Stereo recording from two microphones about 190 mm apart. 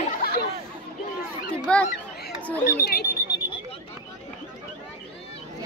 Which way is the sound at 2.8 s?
55° left (ahead or behind).